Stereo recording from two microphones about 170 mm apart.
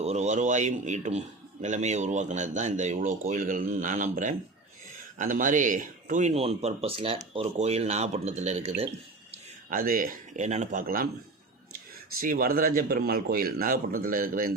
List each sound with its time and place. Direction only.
0.0 s speech: 40° right (ahead or behind)
9.6 s speech: 55° right (ahead or behind)
12.2 s a man's voice: 55° right (ahead or behind)